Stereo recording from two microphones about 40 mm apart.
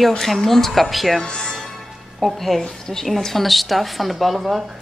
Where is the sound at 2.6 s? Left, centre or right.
Centre.